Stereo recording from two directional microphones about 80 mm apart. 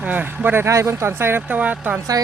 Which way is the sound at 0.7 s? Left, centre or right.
Right.